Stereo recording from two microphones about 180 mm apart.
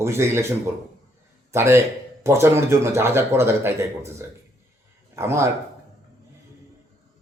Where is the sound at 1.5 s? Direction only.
15° right (ahead or behind).